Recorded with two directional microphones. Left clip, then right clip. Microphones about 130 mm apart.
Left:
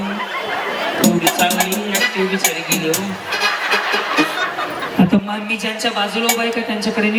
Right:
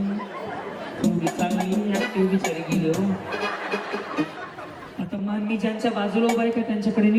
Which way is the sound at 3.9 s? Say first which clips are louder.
Left 11 dB; 30° left (ahead or behind).